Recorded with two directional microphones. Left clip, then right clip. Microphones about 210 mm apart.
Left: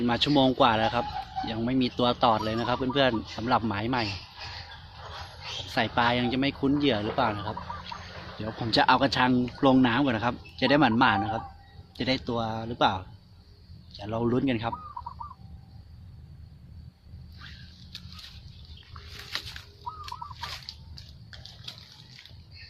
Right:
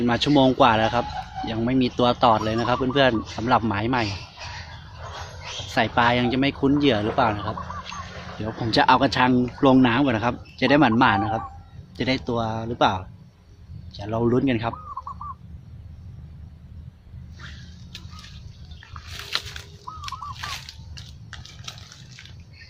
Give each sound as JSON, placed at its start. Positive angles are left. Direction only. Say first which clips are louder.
{"t": 0.0, "sound": "speech", "louder": "right 5 dB", "side_deg": 0}
{"t": 5.0, "sound": "music", "louder": "right 4 dB", "side_deg": 45}
{"t": 5.6, "sound": "speech", "louder": "right 5 dB", "side_deg": 0}
{"t": 19.3, "sound": "a sound", "louder": "right 7 dB", "side_deg": -20}